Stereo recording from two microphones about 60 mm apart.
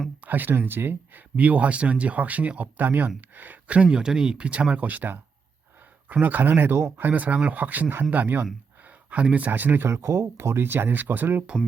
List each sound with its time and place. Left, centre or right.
0.2 s speech: right
1.4 s speech: right
3.8 s speech: centre; by 7.1 s right
7.1 s speech: right
9.9 s speech: right